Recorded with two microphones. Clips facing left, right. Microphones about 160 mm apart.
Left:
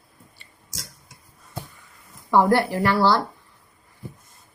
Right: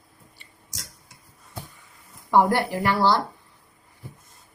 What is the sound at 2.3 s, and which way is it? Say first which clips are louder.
Speech: left 2 dB; 15° right (ahead or behind).